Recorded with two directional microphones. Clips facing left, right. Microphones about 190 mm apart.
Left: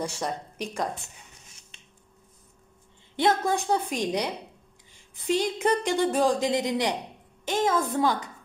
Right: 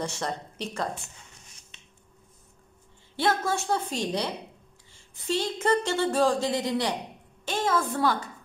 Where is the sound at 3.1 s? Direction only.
20° left (ahead or behind).